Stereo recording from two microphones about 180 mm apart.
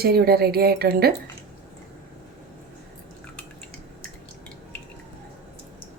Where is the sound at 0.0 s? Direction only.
60° right (ahead or behind).